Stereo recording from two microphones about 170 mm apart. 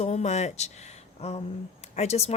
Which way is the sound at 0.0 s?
40° left (ahead or behind).